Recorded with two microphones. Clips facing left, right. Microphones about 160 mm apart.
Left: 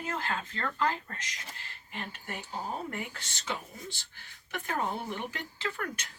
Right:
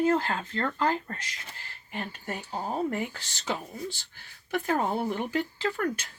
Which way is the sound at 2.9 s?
35° right (ahead or behind).